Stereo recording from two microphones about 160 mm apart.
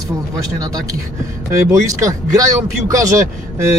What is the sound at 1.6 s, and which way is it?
Speech, 20° right (ahead or behind).